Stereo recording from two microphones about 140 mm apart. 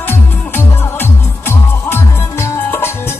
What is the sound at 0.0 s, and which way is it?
Music, 15° left (ahead or behind).